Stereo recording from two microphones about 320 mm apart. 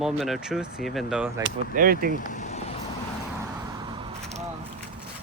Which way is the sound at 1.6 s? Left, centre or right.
Right.